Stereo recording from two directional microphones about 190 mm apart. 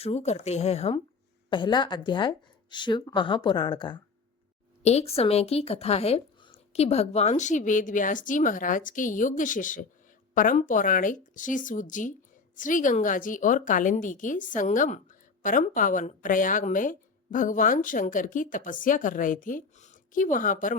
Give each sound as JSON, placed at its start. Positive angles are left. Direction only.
{"t": 0.0, "sound": "speech", "side_deg": 35}
{"t": 4.8, "sound": "speech", "side_deg": 35}